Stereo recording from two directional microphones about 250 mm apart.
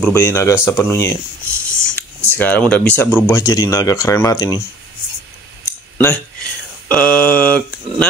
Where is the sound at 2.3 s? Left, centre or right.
Centre.